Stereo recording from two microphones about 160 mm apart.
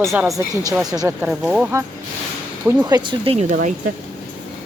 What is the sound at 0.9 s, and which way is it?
Speech, 25° right (ahead or behind).